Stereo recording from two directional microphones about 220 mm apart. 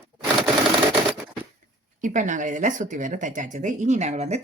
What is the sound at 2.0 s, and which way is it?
Speech, 35° right (ahead or behind).